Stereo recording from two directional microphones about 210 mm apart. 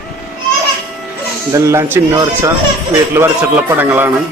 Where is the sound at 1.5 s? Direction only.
15° right (ahead or behind).